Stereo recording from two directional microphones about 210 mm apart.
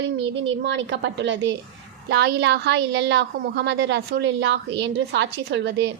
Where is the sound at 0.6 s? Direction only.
60° right (ahead or behind).